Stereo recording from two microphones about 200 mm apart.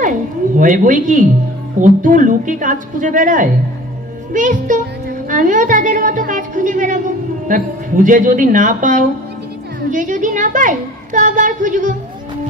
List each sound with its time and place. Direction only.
0.6 s a woman's voice: 40° right (ahead or behind)